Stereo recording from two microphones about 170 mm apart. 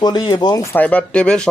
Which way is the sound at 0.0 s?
25° left (ahead or behind).